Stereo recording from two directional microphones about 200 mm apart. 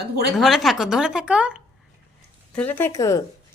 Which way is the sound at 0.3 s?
Centre (ahead or behind).